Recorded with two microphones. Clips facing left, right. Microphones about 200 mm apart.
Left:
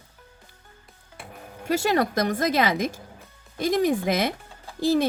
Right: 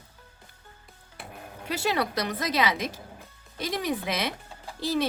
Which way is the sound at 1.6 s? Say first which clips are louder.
Left 5 dB; 45° left (ahead or behind).